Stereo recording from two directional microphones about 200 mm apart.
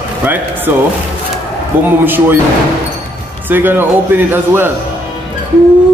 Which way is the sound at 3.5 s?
10° right (ahead or behind).